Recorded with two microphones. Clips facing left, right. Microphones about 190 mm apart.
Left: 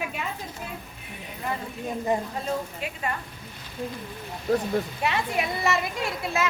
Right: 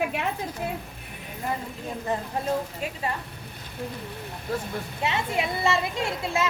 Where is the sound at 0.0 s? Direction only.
65° right (ahead or behind).